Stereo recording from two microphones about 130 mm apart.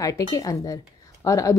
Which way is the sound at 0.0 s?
25° left (ahead or behind).